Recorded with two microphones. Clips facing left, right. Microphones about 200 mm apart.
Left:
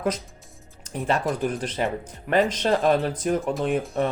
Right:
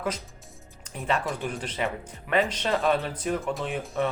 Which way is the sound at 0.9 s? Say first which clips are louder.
Left 4 dB; 40° left (ahead or behind).